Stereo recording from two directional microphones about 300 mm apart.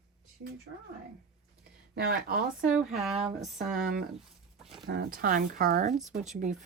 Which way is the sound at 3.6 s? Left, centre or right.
Right.